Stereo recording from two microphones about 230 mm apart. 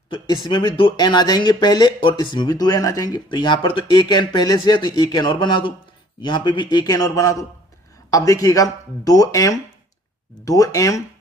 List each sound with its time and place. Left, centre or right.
0.1 s speech: centre